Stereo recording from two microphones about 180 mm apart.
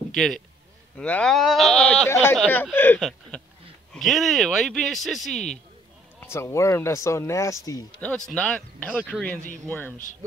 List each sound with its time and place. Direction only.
0.1 s a man's voice: centre (ahead or behind)
3.0 s a sound: centre (ahead or behind)
3.9 s speech: centre (ahead or behind)
6.1 s speech: 15° left (ahead or behind)
8.3 s speech: 5° left (ahead or behind)